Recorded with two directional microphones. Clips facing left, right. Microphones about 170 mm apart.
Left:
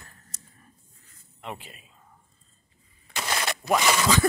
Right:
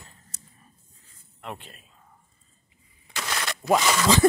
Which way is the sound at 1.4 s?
Centre (ahead or behind).